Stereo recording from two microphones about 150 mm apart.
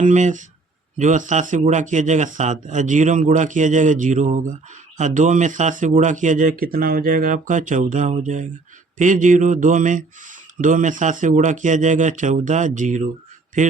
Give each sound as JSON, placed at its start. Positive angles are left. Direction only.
{"t": 0.0, "sound": "speech", "side_deg": -55}